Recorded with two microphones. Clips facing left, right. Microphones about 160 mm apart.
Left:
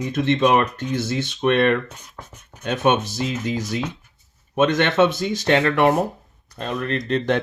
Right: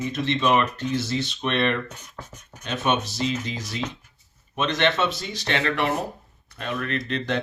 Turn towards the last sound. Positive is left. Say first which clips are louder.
# left 5 dB
turn(degrees=40)  # may be behind; listen again after turning